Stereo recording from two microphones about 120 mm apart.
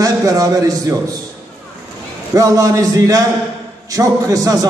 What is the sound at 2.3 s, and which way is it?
A man's voice, 30° right (ahead or behind).